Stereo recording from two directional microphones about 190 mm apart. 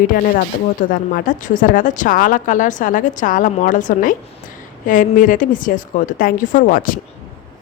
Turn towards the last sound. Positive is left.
turn(degrees=45)  # may be behind; listen again after turning